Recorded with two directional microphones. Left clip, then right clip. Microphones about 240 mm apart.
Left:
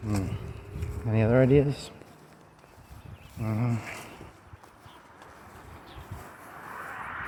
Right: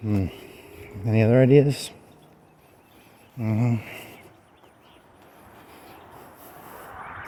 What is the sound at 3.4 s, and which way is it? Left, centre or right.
Speech, right.